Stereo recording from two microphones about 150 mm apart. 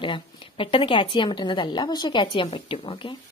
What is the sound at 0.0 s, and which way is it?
A woman's voice, 35° left (ahead or behind).